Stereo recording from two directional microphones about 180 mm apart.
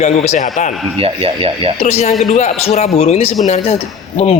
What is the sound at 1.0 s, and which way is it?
Speech, 30° right (ahead or behind).